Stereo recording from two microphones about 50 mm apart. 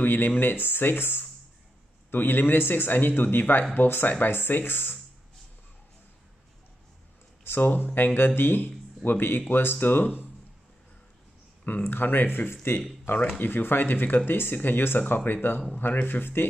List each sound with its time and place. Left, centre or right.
0.0 s speech: left
7.4 s speech: left
11.6 s speech: left
15.1 s speech: left